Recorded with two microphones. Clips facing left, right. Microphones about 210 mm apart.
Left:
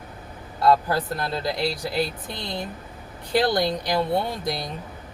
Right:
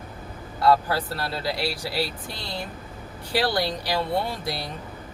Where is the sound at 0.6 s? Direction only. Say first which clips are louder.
Left 1 dB; 20° left (ahead or behind).